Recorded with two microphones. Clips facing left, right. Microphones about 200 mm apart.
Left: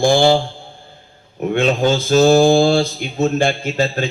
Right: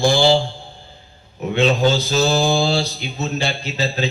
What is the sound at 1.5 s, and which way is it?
Mantra, 50° left (ahead or behind).